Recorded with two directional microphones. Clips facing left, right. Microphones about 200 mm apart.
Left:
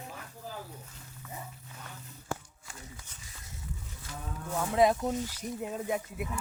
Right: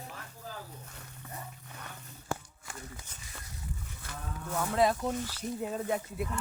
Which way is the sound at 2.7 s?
65° right (ahead or behind).